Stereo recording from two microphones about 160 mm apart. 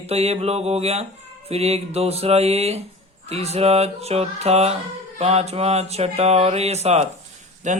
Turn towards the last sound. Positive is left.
turn(degrees=-50)  # may be behind; listen again after turning